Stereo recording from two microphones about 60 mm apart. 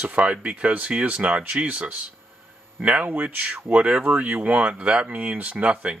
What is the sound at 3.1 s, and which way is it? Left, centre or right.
Speech, right.